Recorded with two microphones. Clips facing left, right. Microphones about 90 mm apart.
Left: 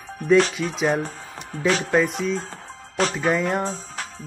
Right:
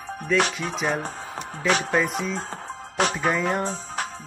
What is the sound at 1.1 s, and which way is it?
Music, 45° right (ahead or behind).